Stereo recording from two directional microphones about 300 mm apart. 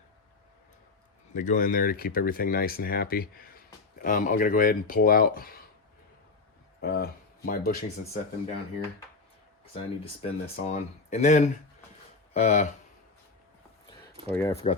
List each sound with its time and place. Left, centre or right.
1.3 s speech: left
6.8 s speech: left
9.7 s speech: centre
14.3 s speech: centre
14.5 s speech: centre